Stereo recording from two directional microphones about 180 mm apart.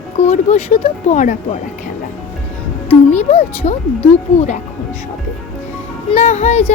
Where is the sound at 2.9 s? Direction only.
35° left (ahead or behind).